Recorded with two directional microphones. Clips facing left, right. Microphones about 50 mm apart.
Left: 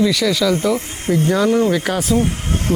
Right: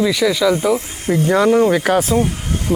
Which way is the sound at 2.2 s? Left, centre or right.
Left.